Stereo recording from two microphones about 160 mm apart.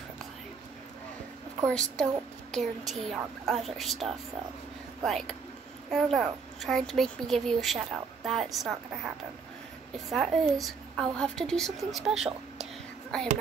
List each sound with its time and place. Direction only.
1.7 s a woman's voice: 5° left (ahead or behind)